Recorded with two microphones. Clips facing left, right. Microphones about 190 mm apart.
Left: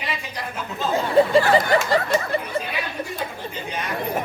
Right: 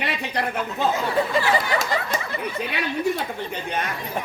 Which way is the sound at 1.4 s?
50° left (ahead or behind).